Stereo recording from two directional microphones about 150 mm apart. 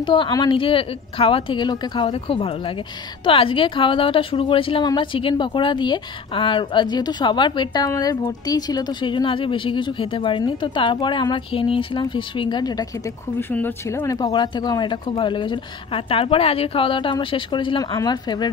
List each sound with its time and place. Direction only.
0.0 s a woman's voice: 30° left (ahead or behind)
13.4 s a woman's voice: 10° left (ahead or behind); by 18.5 s 30° left (ahead or behind)